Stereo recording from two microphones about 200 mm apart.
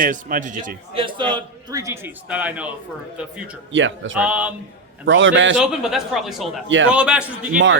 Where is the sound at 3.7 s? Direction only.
70° right (ahead or behind).